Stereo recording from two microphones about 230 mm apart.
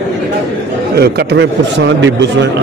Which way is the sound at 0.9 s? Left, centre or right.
Right.